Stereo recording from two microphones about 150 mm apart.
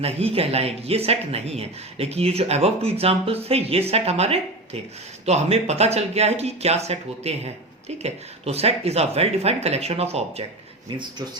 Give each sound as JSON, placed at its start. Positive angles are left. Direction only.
{"t": 0.0, "sound": "speech", "side_deg": -40}